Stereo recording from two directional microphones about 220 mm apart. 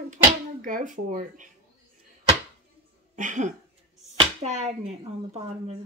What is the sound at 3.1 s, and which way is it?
Speech, 35° right (ahead or behind).